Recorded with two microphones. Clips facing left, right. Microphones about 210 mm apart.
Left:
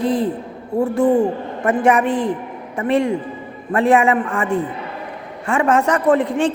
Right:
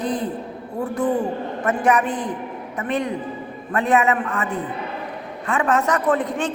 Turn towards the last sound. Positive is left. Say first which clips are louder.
# left 5 dB
turn(degrees=25)  # may be behind; listen again after turning